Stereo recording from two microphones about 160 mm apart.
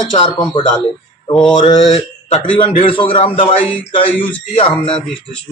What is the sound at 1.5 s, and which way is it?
Mantra, 25° left (ahead or behind).